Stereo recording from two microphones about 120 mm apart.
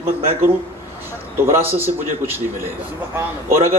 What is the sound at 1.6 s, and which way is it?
A man's voice, 20° right (ahead or behind).